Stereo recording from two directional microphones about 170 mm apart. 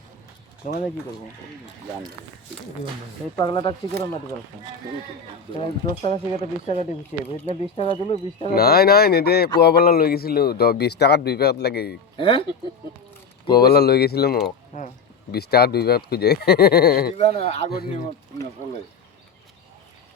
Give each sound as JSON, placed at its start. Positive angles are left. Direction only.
{"t": 0.6, "sound": "speech", "side_deg": 45}
{"t": 3.3, "sound": "speech", "side_deg": 25}
{"t": 6.0, "sound": "speech", "side_deg": 40}
{"t": 8.5, "sound": "a man's voice", "side_deg": 65}
{"t": 12.1, "sound": "speech", "side_deg": 30}
{"t": 13.6, "sound": "a man's voice", "side_deg": 70}
{"t": 14.7, "sound": "speech", "side_deg": 45}
{"t": 15.3, "sound": "a man's voice", "side_deg": 70}
{"t": 17.2, "sound": "speech", "side_deg": 40}